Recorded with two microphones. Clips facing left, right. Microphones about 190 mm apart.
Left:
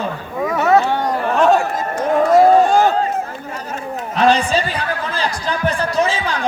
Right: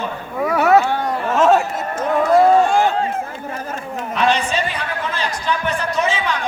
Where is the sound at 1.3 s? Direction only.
Centre (ahead or behind).